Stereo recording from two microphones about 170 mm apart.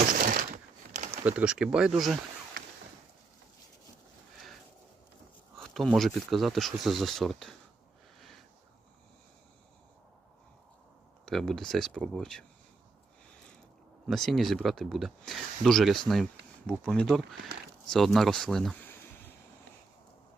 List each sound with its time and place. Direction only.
0.1 s a sound: 55° right (ahead or behind)
1.2 s speech: 10° right (ahead or behind)
5.5 s speech: centre (ahead or behind)
8.2 s a sound: centre (ahead or behind)
11.3 s speech: centre (ahead or behind)
14.1 s speech: centre (ahead or behind)